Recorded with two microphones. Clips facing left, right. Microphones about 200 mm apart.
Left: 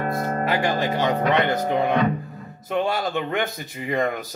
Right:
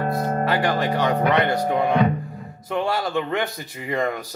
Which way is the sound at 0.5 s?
20° left (ahead or behind).